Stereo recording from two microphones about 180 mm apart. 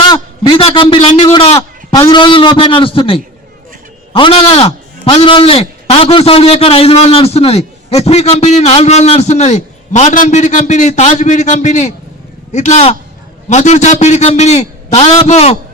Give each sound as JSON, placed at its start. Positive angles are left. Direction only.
{"t": 0.1, "sound": "a man's voice", "side_deg": 25}